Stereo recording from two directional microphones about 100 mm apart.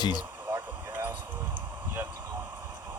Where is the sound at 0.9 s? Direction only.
15° right (ahead or behind).